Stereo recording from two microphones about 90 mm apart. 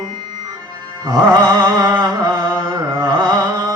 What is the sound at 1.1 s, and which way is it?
Music, 45° right (ahead or behind).